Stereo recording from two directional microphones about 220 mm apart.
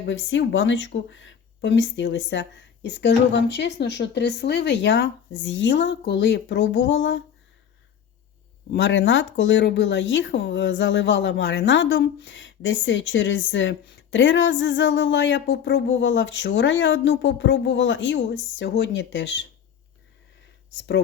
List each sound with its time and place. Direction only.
0.0 s speech: 55° left (ahead or behind)
8.7 s speech: 55° left (ahead or behind)